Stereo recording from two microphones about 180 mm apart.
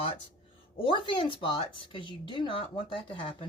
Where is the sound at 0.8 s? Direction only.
30° left (ahead or behind).